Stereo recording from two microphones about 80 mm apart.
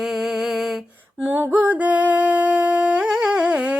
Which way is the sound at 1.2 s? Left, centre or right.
Right.